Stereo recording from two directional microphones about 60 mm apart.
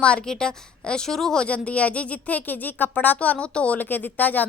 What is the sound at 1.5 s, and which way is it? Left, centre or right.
A woman's voice, left.